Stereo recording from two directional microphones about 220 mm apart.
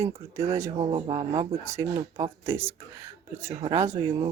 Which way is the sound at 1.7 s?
15° right (ahead or behind).